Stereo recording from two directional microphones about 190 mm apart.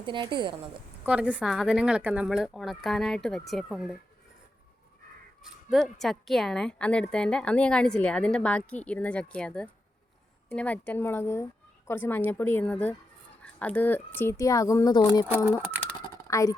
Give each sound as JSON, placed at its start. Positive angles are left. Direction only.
{"t": 0.0, "sound": "a woman's voice", "side_deg": -25}
{"t": 1.0, "sound": "a woman's voice", "side_deg": -5}
{"t": 5.7, "sound": "a woman's voice", "side_deg": 0}
{"t": 15.4, "sound": "speech", "side_deg": -10}
{"t": 16.0, "sound": "typing", "side_deg": 15}